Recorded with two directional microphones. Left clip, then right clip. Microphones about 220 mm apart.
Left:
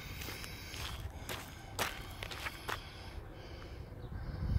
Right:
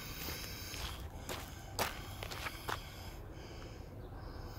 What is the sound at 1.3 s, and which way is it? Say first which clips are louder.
Walk: left 1 dB; centre (ahead or behind).